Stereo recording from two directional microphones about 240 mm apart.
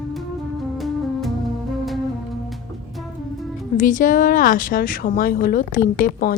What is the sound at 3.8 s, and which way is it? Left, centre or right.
Speech, left.